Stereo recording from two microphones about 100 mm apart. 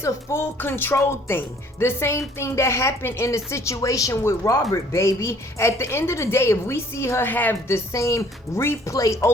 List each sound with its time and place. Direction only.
0.0 s speech: 25° left (ahead or behind)
7.9 s speech: 30° left (ahead or behind)